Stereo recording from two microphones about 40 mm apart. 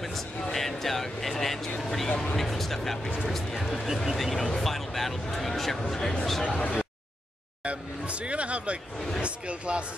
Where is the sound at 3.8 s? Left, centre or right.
Centre.